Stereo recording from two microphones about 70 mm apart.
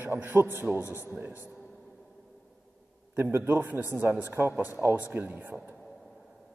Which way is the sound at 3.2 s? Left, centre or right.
Right.